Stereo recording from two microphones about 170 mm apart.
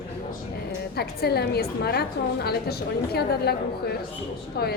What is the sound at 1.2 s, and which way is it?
A woman's voice, 70° left (ahead or behind).